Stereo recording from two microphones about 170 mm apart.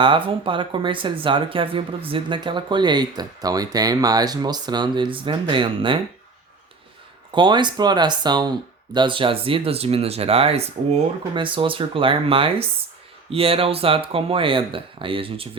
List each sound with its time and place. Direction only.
0.3 s speech: 30° right (ahead or behind)
7.3 s speech: 25° right (ahead or behind)